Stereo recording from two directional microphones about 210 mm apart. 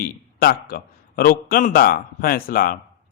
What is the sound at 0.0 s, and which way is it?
A man's voice, 45° left (ahead or behind).